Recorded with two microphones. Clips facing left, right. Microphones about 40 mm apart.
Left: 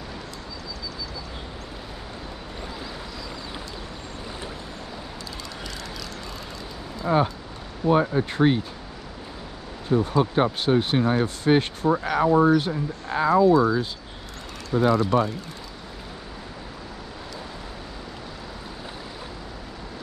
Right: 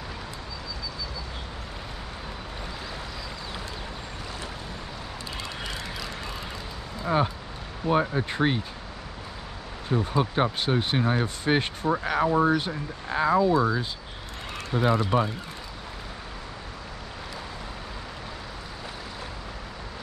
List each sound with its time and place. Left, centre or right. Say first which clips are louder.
7.1 s speech: left 3 dB; centre
9.8 s speech: left 4 dB; centre
14.7 s speech: left 4 dB; right
15.0 s speech: left 3 dB; centre